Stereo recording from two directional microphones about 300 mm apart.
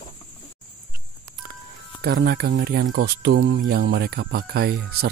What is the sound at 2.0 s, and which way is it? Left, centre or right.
Speech, right.